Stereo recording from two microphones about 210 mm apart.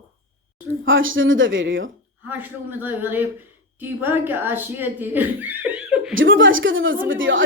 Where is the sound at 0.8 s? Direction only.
65° right (ahead or behind).